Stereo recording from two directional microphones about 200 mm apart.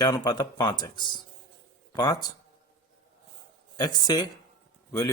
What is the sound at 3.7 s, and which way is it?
Speech, 20° left (ahead or behind).